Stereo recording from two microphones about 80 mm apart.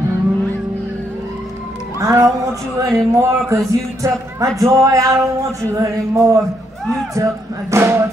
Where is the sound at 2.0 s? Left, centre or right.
Right.